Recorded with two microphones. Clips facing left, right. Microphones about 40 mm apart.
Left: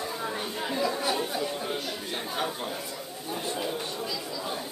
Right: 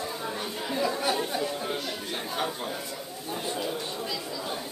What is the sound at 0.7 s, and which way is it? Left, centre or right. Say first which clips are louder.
Chatter: right 1 dB; centre.